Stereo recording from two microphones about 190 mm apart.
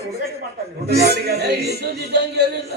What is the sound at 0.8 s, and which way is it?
A man's voice, 55° right (ahead or behind).